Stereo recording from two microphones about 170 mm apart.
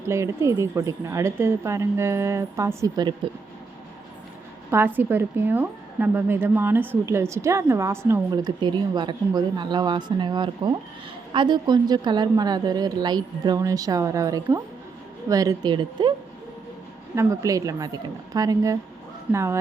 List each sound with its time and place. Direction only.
0.1 s a woman's voice: 15° right (ahead or behind)
4.7 s a woman's voice: 10° right (ahead or behind); by 16.1 s 30° right (ahead or behind)
17.2 s a woman's voice: 20° right (ahead or behind)